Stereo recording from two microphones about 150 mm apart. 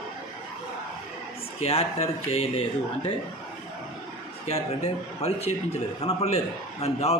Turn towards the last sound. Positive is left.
turn(degrees=45)  # may be behind; listen again after turning